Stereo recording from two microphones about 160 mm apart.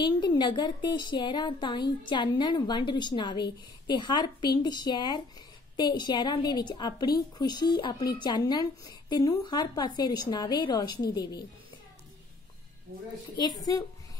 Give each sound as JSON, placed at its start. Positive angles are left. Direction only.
{"t": 0.0, "sound": "a woman's voice", "side_deg": 25}